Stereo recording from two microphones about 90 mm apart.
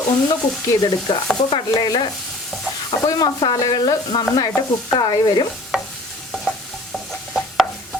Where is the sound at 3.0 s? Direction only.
45° left (ahead or behind).